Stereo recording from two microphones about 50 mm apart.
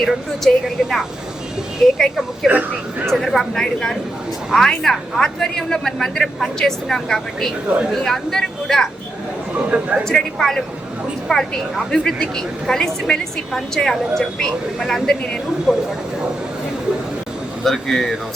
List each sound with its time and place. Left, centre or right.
0.0 s a woman's voice: centre
2.4 s a woman's voice: centre
9.6 s speech: right
10.1 s a woman's voice: centre
15.7 s speech: centre
17.6 s a woman's voice: centre